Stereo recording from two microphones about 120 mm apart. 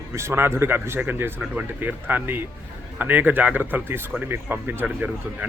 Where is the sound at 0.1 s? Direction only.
20° right (ahead or behind).